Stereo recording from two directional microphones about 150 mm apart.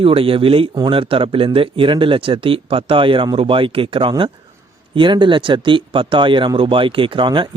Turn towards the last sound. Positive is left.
turn(degrees=-35)  # may be behind; listen again after turning